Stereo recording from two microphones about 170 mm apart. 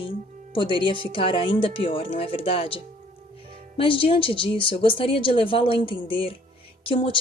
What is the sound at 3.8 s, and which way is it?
Speech, 30° left (ahead or behind).